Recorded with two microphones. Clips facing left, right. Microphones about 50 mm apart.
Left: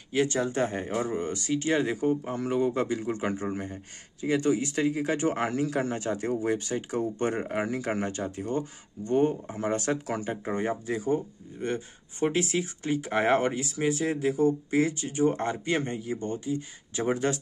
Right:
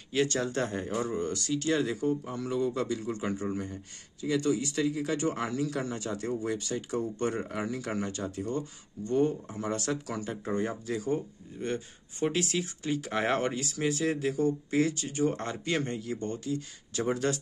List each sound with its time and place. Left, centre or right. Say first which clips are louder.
0.1 s speech: left 2 dB; left